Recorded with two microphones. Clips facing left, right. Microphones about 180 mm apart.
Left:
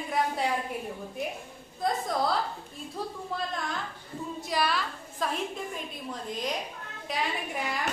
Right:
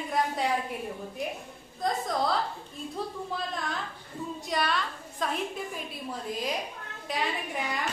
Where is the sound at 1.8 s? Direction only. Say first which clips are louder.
Even; centre (ahead or behind).